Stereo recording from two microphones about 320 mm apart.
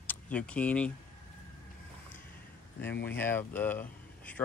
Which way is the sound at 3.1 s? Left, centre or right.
Centre.